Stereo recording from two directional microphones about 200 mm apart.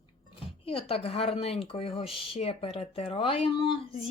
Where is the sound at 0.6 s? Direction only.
30° left (ahead or behind).